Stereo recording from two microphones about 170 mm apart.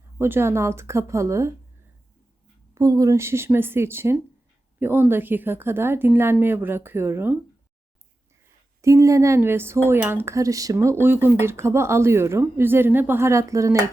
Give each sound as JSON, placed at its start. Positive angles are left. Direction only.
{"t": 0.2, "sound": "speech", "side_deg": -15}
{"t": 2.7, "sound": "speech", "side_deg": -20}
{"t": 8.8, "sound": "speech", "side_deg": -20}